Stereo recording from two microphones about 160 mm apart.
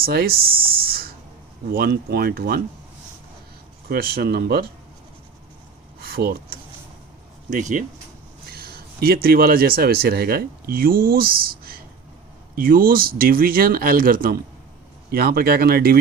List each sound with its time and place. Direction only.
0.0 s speech: 70° right (ahead or behind)
1.7 s speech: 80° right
3.8 s speech: 70° right (ahead or behind)
6.0 s a sound: 75° right (ahead or behind)
7.5 s speech: 50° right (ahead or behind)
8.4 s speech: 75° right (ahead or behind)